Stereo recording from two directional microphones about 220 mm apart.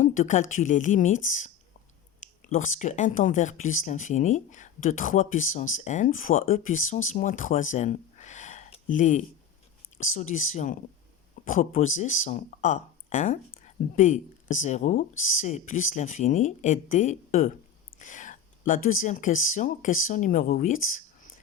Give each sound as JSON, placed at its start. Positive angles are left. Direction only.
{"t": 0.0, "sound": "speech", "side_deg": 35}